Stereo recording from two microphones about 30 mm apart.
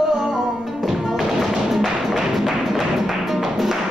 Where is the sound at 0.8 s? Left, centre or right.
Centre.